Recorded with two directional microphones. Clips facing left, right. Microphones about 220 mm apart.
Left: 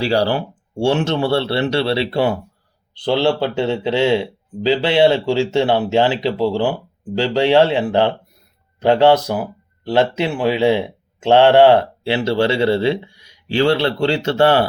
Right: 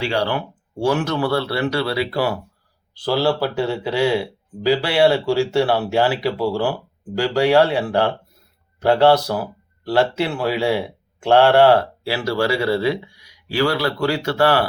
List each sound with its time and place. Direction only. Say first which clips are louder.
0.0 s speech: left 4 dB; 35° left (ahead or behind)